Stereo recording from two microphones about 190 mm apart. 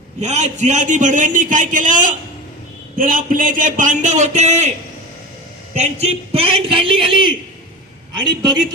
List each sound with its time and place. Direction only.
0.2 s a man's voice: 35° right (ahead or behind)
5.7 s a man's voice: 35° right (ahead or behind)